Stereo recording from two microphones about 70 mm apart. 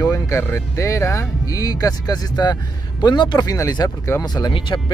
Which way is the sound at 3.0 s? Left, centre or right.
Left.